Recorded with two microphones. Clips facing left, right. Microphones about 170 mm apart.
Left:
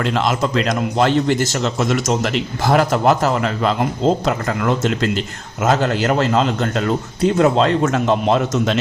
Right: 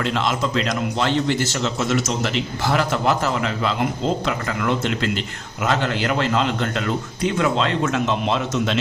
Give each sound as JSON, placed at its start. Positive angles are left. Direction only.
{"t": 0.0, "sound": "a man's voice", "side_deg": 45}